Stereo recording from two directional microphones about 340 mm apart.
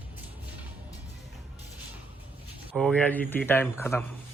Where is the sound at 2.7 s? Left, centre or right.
Centre.